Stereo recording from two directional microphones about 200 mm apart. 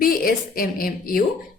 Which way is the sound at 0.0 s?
45° left (ahead or behind).